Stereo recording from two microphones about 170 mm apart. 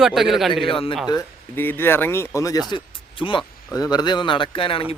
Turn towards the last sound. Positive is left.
turn(degrees=30)  # may be behind; listen again after turning